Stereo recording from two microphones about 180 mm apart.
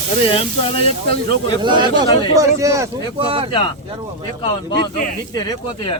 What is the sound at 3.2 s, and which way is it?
Speech, 30° right (ahead or behind).